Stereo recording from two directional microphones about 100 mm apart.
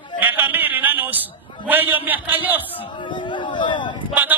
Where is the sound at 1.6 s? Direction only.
20° right (ahead or behind).